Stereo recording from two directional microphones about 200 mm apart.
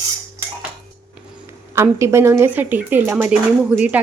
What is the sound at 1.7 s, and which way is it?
Speech, 15° right (ahead or behind).